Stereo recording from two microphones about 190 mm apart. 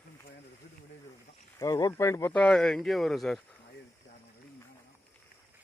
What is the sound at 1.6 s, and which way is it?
Speech, 20° left (ahead or behind).